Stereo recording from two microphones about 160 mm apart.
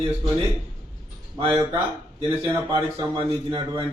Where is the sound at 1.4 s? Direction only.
30° right (ahead or behind).